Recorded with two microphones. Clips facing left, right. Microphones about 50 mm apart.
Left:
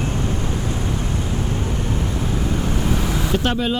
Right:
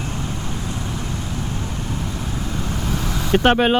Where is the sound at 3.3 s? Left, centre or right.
Right.